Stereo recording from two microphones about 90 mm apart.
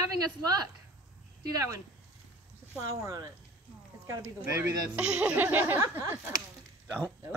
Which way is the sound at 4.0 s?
35° right (ahead or behind).